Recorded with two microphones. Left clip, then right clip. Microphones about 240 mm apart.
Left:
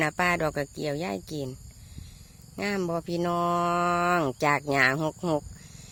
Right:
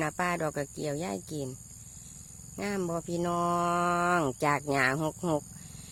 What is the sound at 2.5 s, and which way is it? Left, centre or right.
Speech, centre.